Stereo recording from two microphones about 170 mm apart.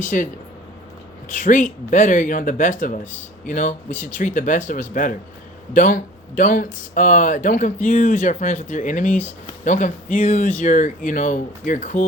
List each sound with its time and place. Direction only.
0.0 s speech: 50° left (ahead or behind)
1.3 s speech: 50° left (ahead or behind)